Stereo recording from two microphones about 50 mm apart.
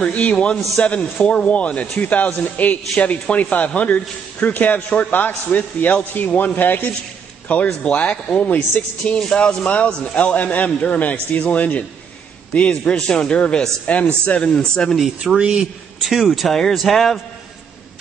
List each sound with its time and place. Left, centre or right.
0.1 s a man's voice: left
15.0 s speech: centre
15.3 s speech: centre
16.0 s speech: centre